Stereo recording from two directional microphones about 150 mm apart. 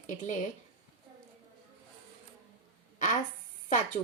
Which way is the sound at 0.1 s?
55° left (ahead or behind).